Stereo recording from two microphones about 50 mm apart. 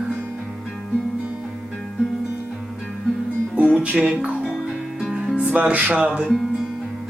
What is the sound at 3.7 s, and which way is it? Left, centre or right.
Music, centre.